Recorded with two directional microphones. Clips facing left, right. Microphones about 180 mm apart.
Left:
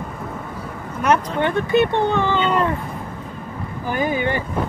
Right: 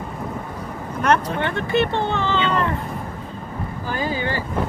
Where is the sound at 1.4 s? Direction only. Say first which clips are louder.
Left 3 dB; 20° left (ahead or behind).